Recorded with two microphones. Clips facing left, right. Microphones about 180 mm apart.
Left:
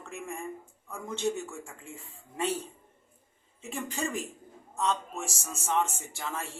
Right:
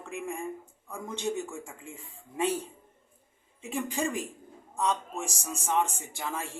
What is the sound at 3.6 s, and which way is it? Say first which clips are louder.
A man's voice: right 3 dB; 15° right (ahead or behind).